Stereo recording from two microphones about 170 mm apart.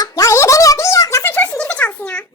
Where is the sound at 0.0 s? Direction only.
20° left (ahead or behind).